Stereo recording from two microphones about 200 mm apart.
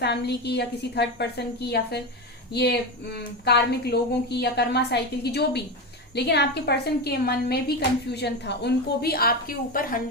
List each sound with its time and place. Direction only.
0.0 s a woman's voice: 55° left (ahead or behind)